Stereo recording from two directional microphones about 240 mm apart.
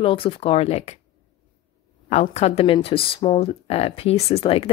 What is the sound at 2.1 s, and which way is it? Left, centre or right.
A woman's voice, left.